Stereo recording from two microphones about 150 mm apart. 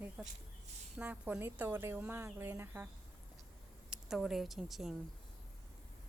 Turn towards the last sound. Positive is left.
turn(degrees=0)  # may be behind; listen again after turning